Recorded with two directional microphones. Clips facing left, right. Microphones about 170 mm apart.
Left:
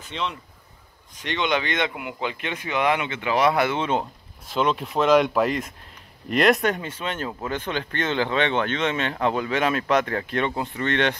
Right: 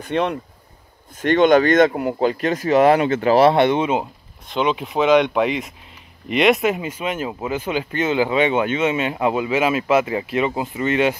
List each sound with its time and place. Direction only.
0.0 s speech: 60° right (ahead or behind)
1.1 s speech: 50° right (ahead or behind); by 3.8 s 25° right (ahead or behind)
3.8 s speech: 10° right (ahead or behind)
4.5 s speech: centre (ahead or behind)